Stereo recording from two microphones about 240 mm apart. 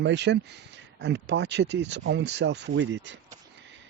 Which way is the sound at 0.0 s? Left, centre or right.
Right.